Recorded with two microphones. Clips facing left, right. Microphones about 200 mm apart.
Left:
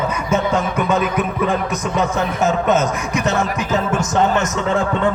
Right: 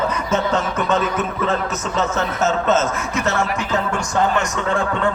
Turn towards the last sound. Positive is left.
turn(degrees=20)  # may be behind; listen again after turning